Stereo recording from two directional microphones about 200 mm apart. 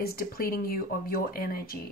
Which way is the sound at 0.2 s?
50° left (ahead or behind).